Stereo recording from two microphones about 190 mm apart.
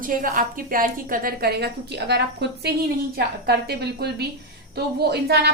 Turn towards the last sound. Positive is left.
turn(degrees=-60)  # may be behind; listen again after turning